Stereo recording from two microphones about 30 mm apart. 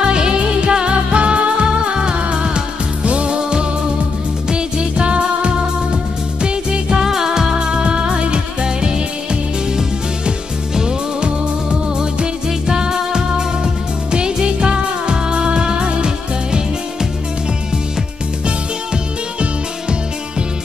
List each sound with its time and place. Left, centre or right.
0.0 s music: right
7.0 s music: centre
10.8 s music: right
12.6 s music: right